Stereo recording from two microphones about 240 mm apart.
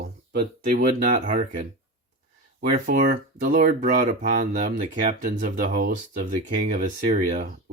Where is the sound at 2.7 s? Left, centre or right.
Right.